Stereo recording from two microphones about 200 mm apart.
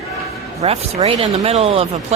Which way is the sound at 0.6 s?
30° right (ahead or behind).